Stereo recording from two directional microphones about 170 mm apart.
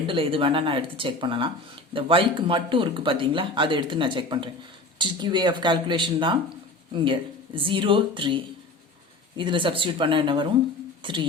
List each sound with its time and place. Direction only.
0.1 s speech: 30° right (ahead or behind)